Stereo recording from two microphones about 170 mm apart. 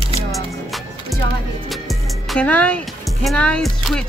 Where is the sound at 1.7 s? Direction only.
Centre (ahead or behind).